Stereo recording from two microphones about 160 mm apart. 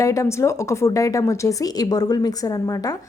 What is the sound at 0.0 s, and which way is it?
Speech, 20° left (ahead or behind).